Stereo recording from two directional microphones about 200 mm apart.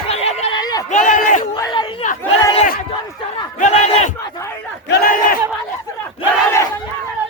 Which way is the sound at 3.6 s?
35° left (ahead or behind).